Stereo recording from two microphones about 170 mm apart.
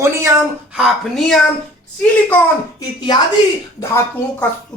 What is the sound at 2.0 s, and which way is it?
Speech, 10° left (ahead or behind).